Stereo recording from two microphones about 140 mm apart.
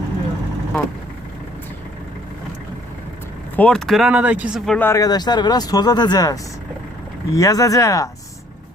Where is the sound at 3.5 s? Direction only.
5° left (ahead or behind); by 4.6 s 10° right (ahead or behind).